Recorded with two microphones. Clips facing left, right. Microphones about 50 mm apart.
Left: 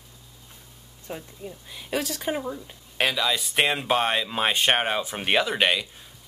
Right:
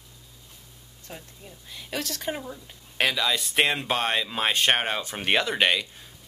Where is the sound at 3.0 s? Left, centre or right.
Centre.